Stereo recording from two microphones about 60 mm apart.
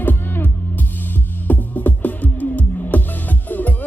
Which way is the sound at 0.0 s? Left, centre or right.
Left.